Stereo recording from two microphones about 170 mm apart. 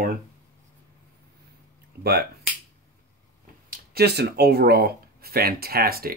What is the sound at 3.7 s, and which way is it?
Speech, 65° right (ahead or behind).